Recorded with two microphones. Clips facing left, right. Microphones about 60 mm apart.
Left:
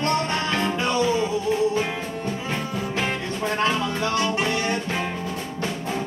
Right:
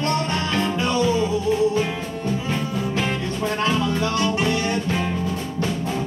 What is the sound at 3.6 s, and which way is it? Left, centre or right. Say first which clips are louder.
Music: right 2 dB; centre.